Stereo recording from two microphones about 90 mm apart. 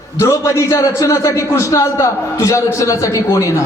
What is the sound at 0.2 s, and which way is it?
A man's voice, 35° left (ahead or behind).